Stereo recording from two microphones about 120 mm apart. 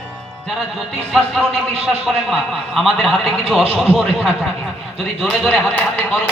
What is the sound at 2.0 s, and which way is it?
A man's voice, centre (ahead or behind).